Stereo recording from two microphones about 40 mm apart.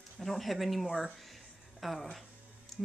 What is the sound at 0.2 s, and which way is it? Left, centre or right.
Speech, centre.